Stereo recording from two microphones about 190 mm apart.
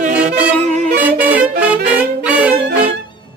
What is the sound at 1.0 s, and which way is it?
Music, 10° right (ahead or behind).